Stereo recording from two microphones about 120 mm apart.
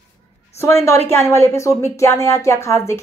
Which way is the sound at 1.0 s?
25° left (ahead or behind).